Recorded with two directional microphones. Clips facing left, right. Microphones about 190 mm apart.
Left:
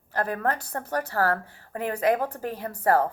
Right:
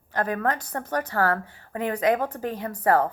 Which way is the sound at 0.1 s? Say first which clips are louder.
Right 1 dB; 35° left (ahead or behind).